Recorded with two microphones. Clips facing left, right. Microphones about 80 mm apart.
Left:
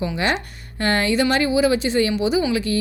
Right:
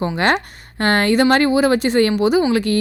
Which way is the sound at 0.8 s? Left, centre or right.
Right.